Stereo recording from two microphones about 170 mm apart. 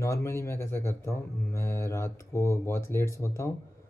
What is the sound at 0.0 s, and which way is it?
Speech, 15° left (ahead or behind).